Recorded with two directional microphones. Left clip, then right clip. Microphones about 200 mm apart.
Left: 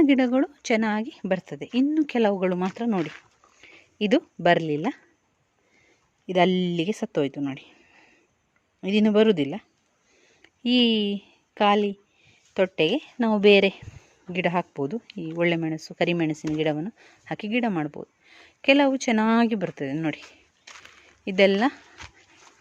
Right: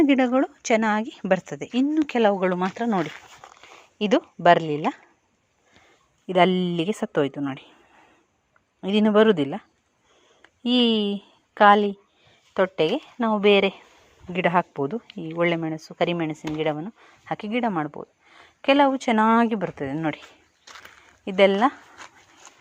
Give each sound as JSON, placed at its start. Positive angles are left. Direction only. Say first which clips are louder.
{"t": 0.0, "sound": "speech", "louder": "right 1 dB", "side_deg": 20}
{"t": 2.0, "sound": "speech", "louder": "right 2 dB", "side_deg": 20}
{"t": 6.2, "sound": "speech", "louder": "right 2 dB", "side_deg": 15}
{"t": 8.8, "sound": "a woman's voice", "louder": "right 2 dB", "side_deg": 10}
{"t": 14.3, "sound": "a woman's voice", "louder": "right 4 dB", "side_deg": 15}
{"t": 20.7, "sound": "a sound", "louder": "right 1 dB", "side_deg": -40}
{"t": 21.2, "sound": "speech", "louder": "right 2 dB", "side_deg": 25}